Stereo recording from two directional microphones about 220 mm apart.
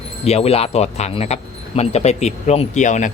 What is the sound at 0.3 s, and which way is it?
Speech, 30° left (ahead or behind).